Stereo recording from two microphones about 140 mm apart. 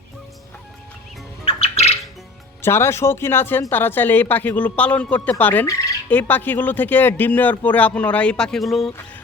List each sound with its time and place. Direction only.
1.5 s bird: 50° left (ahead or behind)
2.6 s a woman's voice: 15° left (ahead or behind); by 8.9 s centre (ahead or behind)